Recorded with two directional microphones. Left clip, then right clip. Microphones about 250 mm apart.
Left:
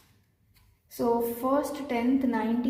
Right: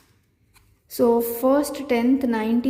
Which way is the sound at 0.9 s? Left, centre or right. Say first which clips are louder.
Right 7 dB; right.